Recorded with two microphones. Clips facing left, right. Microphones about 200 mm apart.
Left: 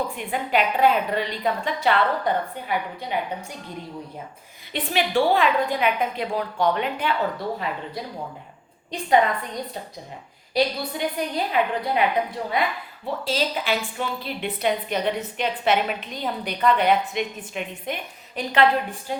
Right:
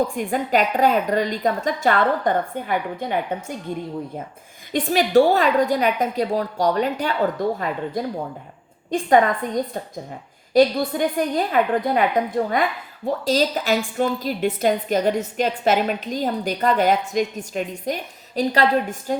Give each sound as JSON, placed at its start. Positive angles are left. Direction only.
{"t": 0.2, "sound": "speech", "side_deg": -45}
{"t": 4.7, "sound": "a woman's voice", "side_deg": -45}